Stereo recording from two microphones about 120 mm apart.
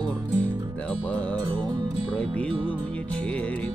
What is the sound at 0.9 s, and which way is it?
Music, 10° left (ahead or behind).